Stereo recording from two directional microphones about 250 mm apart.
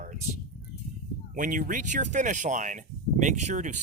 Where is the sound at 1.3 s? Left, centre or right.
Right.